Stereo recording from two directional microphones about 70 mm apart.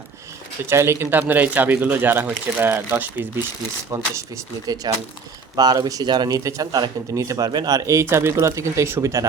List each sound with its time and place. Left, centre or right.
0.7 s speech: right
1.1 s speech: right
3.9 s speech: right
4.6 s a man's voice: right
7.8 s speech: right
8.1 s speech: right